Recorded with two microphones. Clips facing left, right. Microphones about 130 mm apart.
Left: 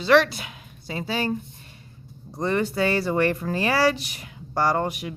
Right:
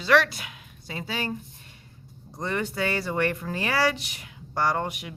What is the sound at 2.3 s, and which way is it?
Speech, 35° left (ahead or behind).